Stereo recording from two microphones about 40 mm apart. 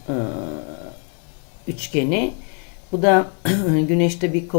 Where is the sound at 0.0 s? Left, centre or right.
Centre.